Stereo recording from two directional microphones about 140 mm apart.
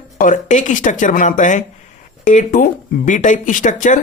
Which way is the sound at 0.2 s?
65° left (ahead or behind).